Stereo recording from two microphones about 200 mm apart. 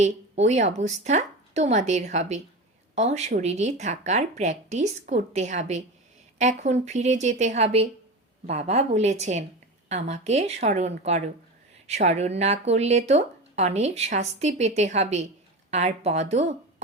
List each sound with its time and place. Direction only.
0.0 s speech: 35° right (ahead or behind)